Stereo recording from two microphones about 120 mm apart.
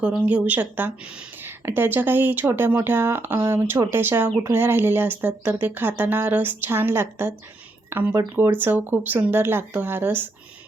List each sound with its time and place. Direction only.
0.0 s speech: 10° right (ahead or behind)